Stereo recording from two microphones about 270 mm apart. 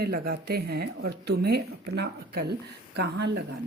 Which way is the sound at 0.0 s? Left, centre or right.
Right.